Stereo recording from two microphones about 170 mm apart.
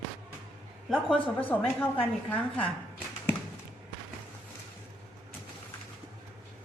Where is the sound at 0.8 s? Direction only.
5° left (ahead or behind).